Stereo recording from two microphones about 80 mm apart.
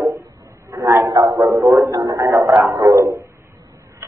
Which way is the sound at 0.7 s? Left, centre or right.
Right.